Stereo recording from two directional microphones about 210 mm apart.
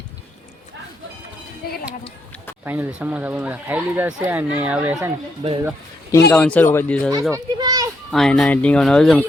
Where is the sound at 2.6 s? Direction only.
10° right (ahead or behind).